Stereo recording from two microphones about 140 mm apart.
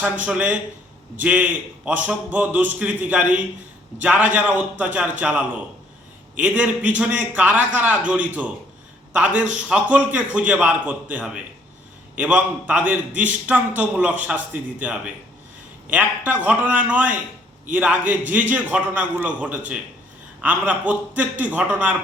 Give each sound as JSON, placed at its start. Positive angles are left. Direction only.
{"t": 0.0, "sound": "a man's voice", "side_deg": -10}